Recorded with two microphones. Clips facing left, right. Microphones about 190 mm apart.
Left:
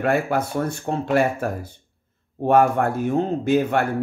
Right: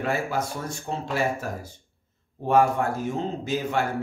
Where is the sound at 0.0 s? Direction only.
60° left (ahead or behind).